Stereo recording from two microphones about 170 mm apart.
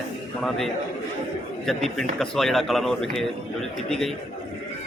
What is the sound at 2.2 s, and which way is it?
Speech, centre (ahead or behind).